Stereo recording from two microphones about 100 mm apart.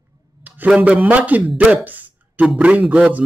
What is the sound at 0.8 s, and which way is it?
Speech, 15° right (ahead or behind).